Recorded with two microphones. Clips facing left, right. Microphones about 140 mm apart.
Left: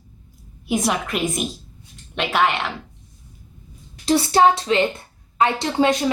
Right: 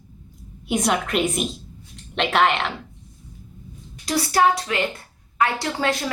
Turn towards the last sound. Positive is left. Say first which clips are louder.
# left 5 dB
turn(degrees=20)  # may be behind; listen again after turning